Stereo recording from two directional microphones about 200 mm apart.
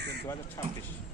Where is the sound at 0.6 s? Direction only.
15° left (ahead or behind).